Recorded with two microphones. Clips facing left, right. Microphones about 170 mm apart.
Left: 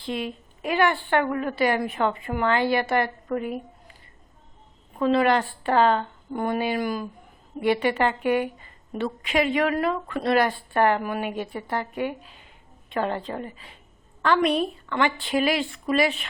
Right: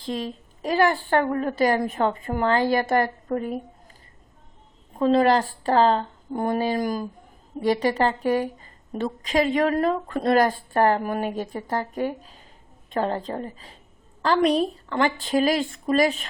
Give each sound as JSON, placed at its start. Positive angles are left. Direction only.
{"t": 0.0, "sound": "a woman's voice", "side_deg": -40}
{"t": 4.9, "sound": "a woman's voice", "side_deg": -40}